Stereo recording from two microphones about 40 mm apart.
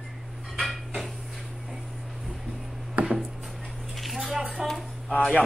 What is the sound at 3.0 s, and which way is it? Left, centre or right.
Chopping, right.